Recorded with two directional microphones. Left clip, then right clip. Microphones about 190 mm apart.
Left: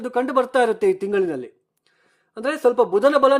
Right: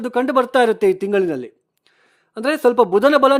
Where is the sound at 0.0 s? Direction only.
25° right (ahead or behind).